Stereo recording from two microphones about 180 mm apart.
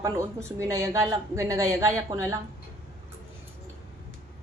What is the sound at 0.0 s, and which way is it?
A woman's voice, 15° right (ahead or behind).